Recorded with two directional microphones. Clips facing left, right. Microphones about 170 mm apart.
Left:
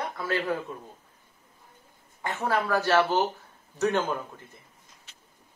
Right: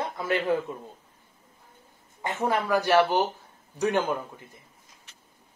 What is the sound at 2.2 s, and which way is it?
Speech, 20° right (ahead or behind).